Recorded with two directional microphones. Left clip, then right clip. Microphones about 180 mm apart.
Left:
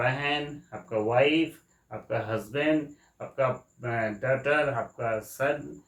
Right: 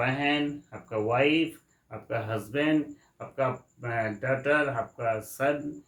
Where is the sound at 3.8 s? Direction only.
15° right (ahead or behind).